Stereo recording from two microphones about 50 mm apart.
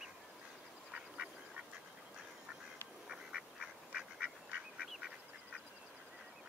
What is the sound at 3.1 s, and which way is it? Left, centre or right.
Duck, centre.